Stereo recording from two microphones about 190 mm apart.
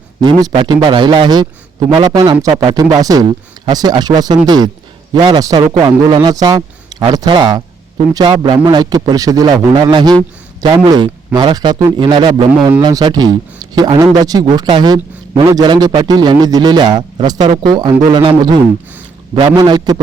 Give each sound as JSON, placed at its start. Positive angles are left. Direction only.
{"t": 0.2, "sound": "a man's voice", "side_deg": -20}